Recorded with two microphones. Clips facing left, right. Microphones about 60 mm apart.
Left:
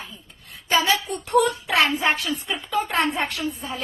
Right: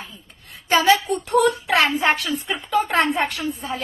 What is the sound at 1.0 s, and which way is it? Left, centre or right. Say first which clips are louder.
A woman's voice: right 2 dB; right.